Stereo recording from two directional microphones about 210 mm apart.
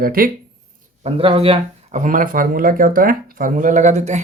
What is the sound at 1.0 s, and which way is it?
Speech, 25° right (ahead or behind).